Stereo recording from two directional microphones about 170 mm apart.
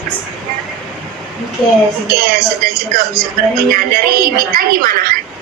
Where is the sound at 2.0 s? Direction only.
65° right (ahead or behind).